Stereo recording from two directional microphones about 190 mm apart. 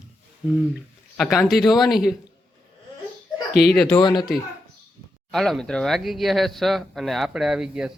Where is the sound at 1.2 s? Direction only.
Centre (ahead or behind).